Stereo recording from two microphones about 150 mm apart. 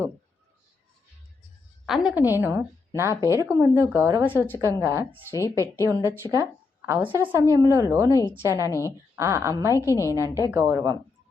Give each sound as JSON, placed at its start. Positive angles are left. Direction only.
{"t": 1.9, "sound": "speech", "side_deg": -10}
{"t": 2.4, "sound": "a woman's voice", "side_deg": -20}
{"t": 5.3, "sound": "a woman's voice", "side_deg": 20}
{"t": 6.2, "sound": "a woman's voice", "side_deg": -20}
{"t": 9.8, "sound": "a woman's voice", "side_deg": 20}
{"t": 10.5, "sound": "a woman's voice", "side_deg": -20}